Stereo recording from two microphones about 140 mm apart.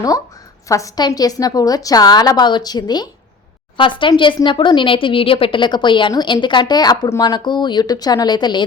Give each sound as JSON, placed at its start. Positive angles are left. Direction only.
{"t": 0.7, "sound": "a woman's voice", "side_deg": 25}